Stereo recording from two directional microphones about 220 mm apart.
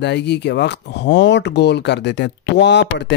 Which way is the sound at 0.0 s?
50° left (ahead or behind).